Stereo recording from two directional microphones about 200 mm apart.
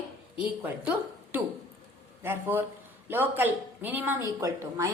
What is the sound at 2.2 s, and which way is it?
Speech, 10° right (ahead or behind).